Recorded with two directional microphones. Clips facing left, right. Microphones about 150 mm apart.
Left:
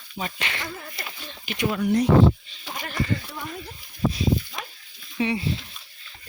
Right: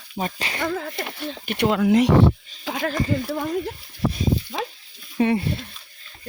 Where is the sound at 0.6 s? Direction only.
65° right (ahead or behind); by 2.9 s 90° right.